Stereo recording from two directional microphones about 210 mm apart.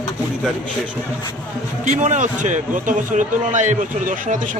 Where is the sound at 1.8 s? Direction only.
35° right (ahead or behind).